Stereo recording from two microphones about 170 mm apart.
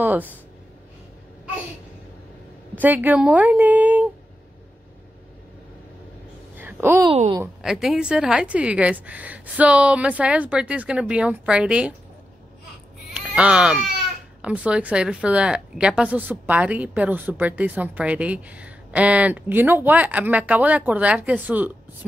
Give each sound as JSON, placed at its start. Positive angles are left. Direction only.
{"t": 2.8, "sound": "a woman's voice", "side_deg": -10}
{"t": 6.5, "sound": "a sound", "side_deg": -10}
{"t": 7.1, "sound": "a woman's voice", "side_deg": -30}
{"t": 7.6, "sound": "a woman's voice", "side_deg": 0}
{"t": 13.1, "sound": "a woman's voice", "side_deg": -5}